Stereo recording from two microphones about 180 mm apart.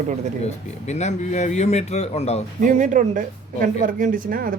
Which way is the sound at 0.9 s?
40° left (ahead or behind).